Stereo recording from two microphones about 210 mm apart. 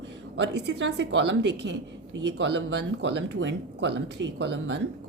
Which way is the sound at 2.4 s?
55° right (ahead or behind).